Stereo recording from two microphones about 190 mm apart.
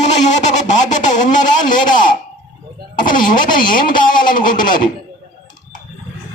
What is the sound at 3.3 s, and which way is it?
Speech, 45° left (ahead or behind).